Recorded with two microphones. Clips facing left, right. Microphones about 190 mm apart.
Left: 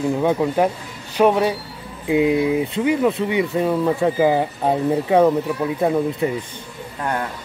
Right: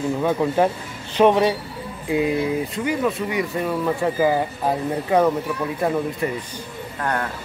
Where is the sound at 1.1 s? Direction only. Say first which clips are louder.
Even; 10° left (ahead or behind).